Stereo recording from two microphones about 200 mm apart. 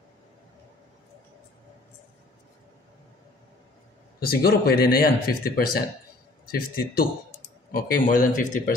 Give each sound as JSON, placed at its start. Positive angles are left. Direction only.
{"t": 4.2, "sound": "speech", "side_deg": 50}